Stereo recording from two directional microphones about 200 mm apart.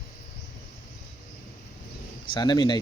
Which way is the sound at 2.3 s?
20° left (ahead or behind).